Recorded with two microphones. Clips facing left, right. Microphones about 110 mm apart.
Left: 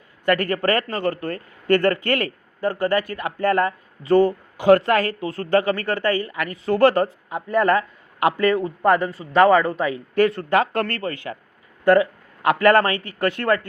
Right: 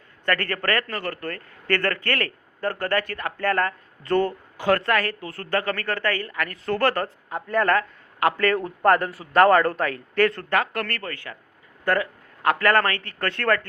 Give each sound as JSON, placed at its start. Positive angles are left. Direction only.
{"t": 0.3, "sound": "a man's voice", "side_deg": 15}
{"t": 10.5, "sound": "a man's voice", "side_deg": 25}